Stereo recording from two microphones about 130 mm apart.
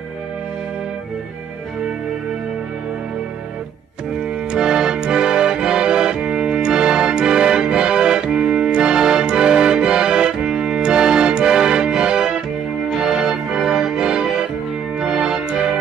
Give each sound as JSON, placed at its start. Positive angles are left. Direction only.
{"t": 4.5, "sound": "music", "side_deg": -5}